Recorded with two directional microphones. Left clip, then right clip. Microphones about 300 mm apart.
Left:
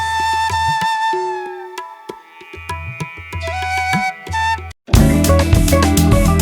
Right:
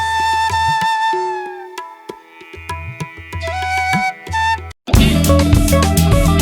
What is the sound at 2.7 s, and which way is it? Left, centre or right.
Tabla, centre.